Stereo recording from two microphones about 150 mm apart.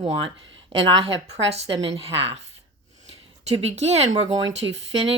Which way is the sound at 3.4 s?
45° right (ahead or behind).